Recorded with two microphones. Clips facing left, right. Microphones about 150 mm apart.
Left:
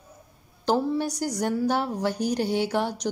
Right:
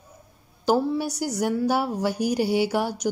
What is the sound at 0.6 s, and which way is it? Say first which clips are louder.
A woman's voice: right 2 dB; 5° right (ahead or behind).